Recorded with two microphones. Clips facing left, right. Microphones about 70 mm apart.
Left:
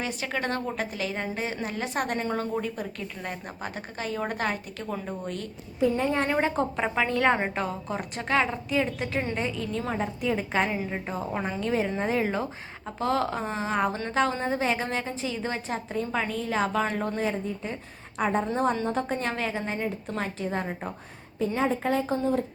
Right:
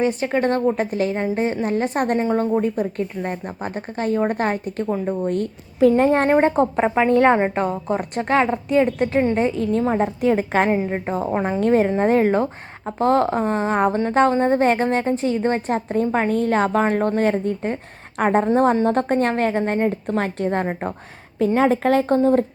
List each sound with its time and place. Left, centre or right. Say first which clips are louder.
0.0 s speech: right 11 dB; right
2.1 s speech: right 9 dB; right
6.0 s speech: right 9 dB; right
6.2 s a woman's voice: right 9 dB; right
7.3 s a woman's voice: right 9 dB; right
7.6 s a woman's voice: right 9 dB; right
9.4 s a woman's voice: right 10 dB; right
9.7 s speech: right 10 dB; right
10.2 s a woman's voice: right 5 dB; right
10.8 s speech: right 8 dB; right
11.6 s a woman's voice: right 11 dB; right